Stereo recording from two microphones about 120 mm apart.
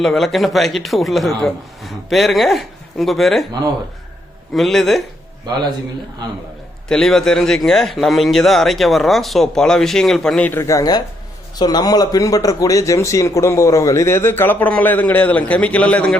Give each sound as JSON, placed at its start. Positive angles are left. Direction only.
{"t": 0.0, "sound": "speech", "side_deg": 0}
{"t": 4.5, "sound": "speech", "side_deg": 0}
{"t": 6.8, "sound": "speech", "side_deg": 5}
{"t": 10.4, "sound": "a man's voice", "side_deg": 20}